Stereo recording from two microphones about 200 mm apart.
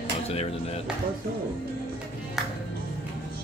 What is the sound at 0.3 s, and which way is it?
Speech, 30° left (ahead or behind).